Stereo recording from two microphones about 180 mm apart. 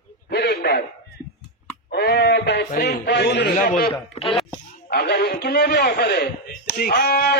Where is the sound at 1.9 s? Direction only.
60° left (ahead or behind).